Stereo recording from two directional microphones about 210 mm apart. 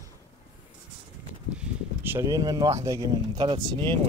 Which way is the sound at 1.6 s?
10° right (ahead or behind).